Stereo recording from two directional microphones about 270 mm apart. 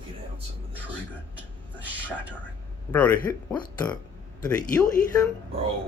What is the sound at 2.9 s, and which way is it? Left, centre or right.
Speech, centre.